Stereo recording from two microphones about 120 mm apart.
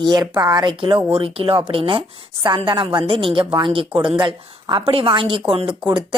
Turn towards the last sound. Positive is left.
turn(degrees=-45)  # may be behind; listen again after turning